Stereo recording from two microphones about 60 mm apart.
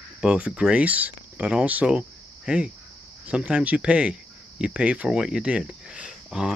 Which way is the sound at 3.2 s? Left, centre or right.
Centre.